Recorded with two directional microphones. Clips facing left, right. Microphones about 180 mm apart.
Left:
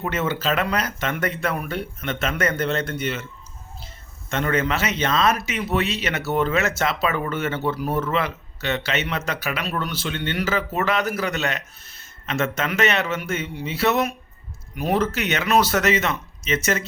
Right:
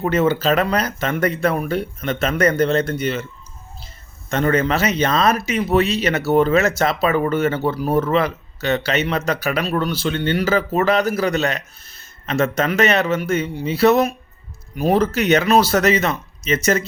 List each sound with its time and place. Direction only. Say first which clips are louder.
0.0 s speech: right 7 dB; 35° right (ahead or behind)
4.3 s speech: right 5 dB; 35° right (ahead or behind)